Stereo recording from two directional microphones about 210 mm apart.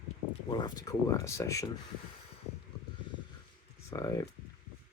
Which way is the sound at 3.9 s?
15° left (ahead or behind).